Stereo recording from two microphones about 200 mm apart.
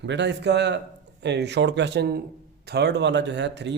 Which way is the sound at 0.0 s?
60° right (ahead or behind).